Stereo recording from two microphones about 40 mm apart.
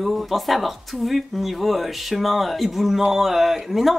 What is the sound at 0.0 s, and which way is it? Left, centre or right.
A man's voice, centre.